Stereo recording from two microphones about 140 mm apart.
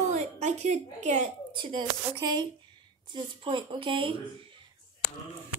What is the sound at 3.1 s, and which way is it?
Speech, 35° right (ahead or behind).